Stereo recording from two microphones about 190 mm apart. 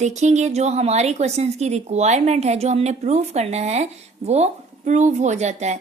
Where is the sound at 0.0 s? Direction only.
40° right (ahead or behind).